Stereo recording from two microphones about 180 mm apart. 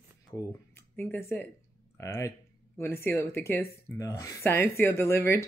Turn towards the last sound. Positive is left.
turn(degrees=15)  # may be behind; listen again after turning